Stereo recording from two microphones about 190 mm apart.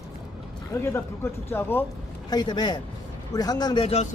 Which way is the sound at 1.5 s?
10° left (ahead or behind).